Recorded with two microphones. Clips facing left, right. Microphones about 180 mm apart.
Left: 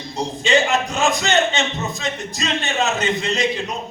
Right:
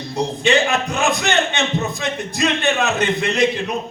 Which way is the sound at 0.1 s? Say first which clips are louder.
Right 1 dB; 60° right (ahead or behind).